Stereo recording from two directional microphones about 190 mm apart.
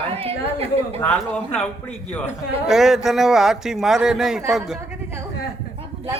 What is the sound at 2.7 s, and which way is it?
Speech, centre (ahead or behind).